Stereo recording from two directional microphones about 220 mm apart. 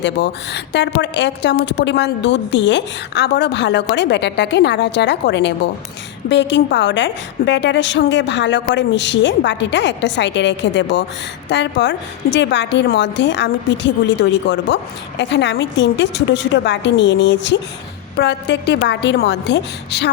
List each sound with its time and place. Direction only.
0.0 s a woman's voice: 50° left (ahead or behind)